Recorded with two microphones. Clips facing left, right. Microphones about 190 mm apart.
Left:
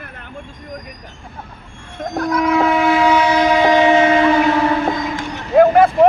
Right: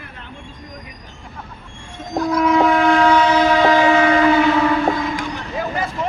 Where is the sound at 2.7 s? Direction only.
5° left (ahead or behind); by 4.2 s 20° left (ahead or behind).